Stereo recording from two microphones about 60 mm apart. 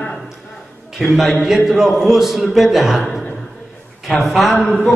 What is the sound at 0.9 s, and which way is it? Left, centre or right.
A man's voice, centre.